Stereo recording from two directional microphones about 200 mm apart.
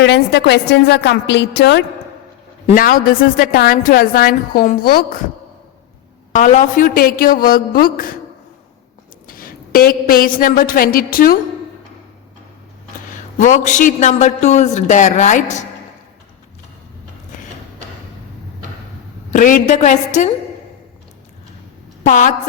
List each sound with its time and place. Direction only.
0.0 s a woman's voice: 55° left (ahead or behind)
2.6 s a woman's voice: 45° left (ahead or behind)
6.3 s a woman's voice: 35° left (ahead or behind)
9.2 s a woman's voice: 45° left (ahead or behind)
13.1 s a man's voice: 40° left (ahead or behind)
19.3 s a man's voice: 40° left (ahead or behind)
22.0 s a man's voice: 40° left (ahead or behind)